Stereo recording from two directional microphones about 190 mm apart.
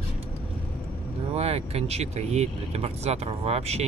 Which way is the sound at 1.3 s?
35° right (ahead or behind).